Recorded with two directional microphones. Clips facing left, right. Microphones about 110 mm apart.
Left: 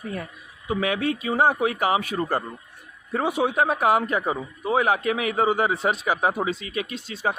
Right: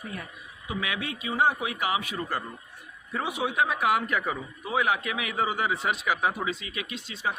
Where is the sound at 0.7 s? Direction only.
40° left (ahead or behind).